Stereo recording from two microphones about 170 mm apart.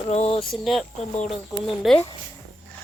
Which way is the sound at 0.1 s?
35° left (ahead or behind).